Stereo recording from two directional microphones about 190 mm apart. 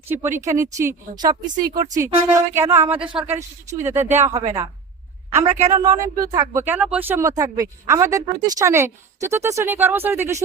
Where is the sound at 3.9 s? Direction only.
10° right (ahead or behind).